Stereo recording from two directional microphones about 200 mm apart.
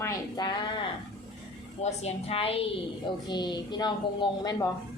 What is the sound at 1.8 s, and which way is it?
A woman's voice, 30° left (ahead or behind).